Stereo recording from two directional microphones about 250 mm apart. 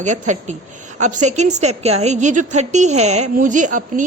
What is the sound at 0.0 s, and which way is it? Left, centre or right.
A woman's voice, right.